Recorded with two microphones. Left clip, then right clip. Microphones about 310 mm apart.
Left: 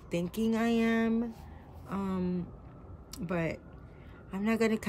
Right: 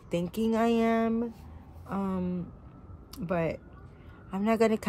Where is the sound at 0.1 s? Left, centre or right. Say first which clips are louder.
Right 3 dB; centre.